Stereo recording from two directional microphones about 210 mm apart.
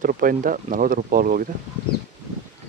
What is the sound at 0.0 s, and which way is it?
Speech, 40° right (ahead or behind).